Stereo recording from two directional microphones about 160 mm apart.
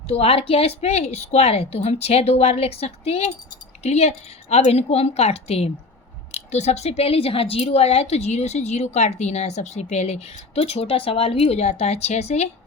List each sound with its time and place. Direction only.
0.1 s a woman's voice: 40° left (ahead or behind)